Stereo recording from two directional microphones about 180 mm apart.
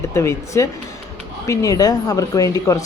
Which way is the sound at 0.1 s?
15° left (ahead or behind).